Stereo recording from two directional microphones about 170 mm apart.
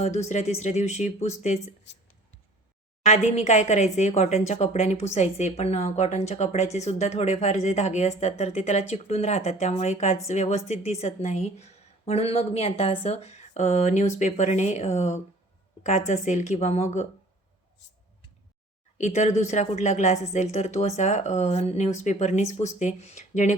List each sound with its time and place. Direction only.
0.0 s speech: 40° left (ahead or behind)
3.1 s speech: 40° left (ahead or behind)
18.9 s speech: 45° left (ahead or behind)